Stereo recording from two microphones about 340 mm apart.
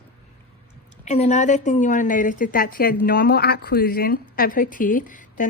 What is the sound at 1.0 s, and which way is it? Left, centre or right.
A woman's voice, centre.